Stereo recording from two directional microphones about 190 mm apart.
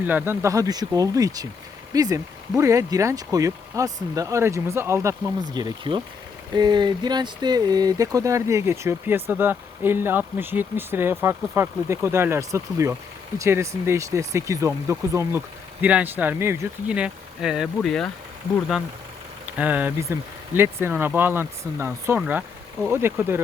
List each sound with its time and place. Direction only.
0.0 s speech: 10° right (ahead or behind)
19.5 s speech: 10° right (ahead or behind)